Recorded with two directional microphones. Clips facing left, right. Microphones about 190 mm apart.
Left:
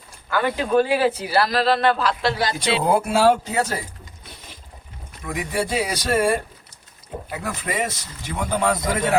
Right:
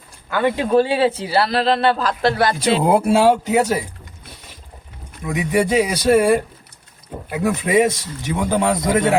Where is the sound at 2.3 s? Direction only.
55° right (ahead or behind).